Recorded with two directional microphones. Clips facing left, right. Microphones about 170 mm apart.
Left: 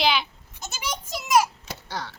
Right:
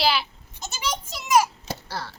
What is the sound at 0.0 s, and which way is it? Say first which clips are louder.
Goat: even; 5° right (ahead or behind).